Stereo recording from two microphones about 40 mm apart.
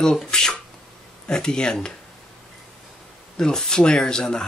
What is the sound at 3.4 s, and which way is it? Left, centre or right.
Speech, centre.